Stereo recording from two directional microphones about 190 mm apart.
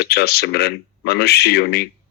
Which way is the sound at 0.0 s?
60° left (ahead or behind).